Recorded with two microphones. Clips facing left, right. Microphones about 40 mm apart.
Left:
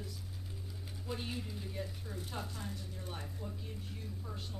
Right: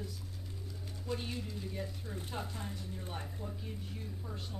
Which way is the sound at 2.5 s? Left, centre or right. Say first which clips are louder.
Right 2 dB; right.